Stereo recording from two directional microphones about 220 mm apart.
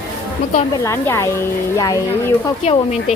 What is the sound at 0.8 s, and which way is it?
Speech, 10° left (ahead or behind).